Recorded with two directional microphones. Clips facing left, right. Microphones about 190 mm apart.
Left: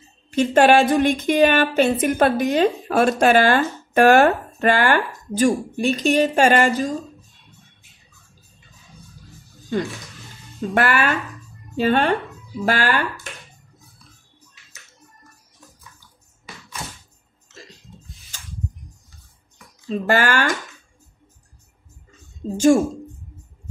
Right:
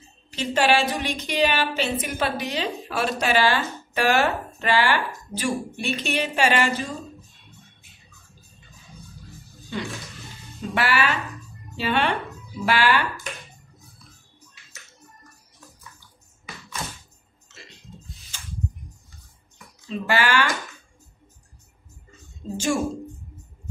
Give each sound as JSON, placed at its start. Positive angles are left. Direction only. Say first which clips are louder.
{"t": 0.3, "sound": "a woman's voice", "louder": "left 7 dB", "side_deg": 50}
{"t": 9.7, "sound": "a woman's voice", "louder": "left 7 dB", "side_deg": 45}
{"t": 19.9, "sound": "speech", "louder": "left 4 dB", "side_deg": 40}